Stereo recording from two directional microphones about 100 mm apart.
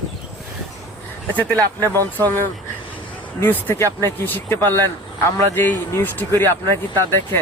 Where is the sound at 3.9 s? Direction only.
20° left (ahead or behind).